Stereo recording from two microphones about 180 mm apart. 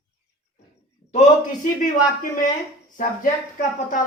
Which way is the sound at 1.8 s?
50° left (ahead or behind).